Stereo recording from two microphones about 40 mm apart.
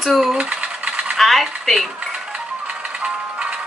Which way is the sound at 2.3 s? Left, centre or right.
Right.